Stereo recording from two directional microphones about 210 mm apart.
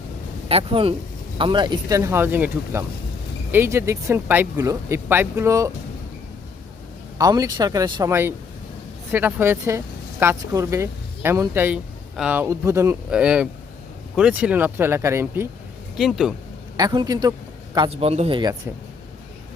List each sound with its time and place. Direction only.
0.4 s speech: 25° right (ahead or behind)
7.2 s speech: 15° right (ahead or behind)
16.0 s speech: centre (ahead or behind)
16.7 s speech: 20° right (ahead or behind)